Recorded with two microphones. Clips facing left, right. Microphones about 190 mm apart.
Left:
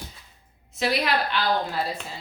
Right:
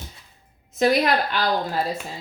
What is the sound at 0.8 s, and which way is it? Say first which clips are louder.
A woman's voice: right 5 dB; 45° right (ahead or behind).